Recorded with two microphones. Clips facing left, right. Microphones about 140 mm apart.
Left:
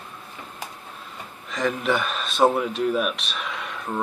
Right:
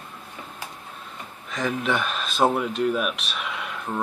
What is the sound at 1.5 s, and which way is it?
Speech, centre (ahead or behind).